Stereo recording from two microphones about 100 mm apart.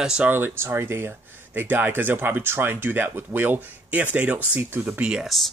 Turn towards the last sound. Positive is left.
turn(degrees=0)  # may be behind; listen again after turning